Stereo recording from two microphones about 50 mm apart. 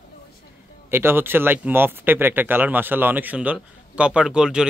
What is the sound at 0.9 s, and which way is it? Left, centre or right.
Speech, right.